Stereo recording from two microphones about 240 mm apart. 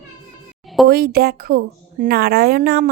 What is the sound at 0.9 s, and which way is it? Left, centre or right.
A woman's voice, right.